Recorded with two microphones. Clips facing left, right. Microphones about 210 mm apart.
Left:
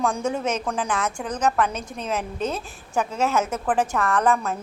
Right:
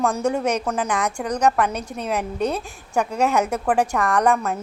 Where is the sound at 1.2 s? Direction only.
5° left (ahead or behind).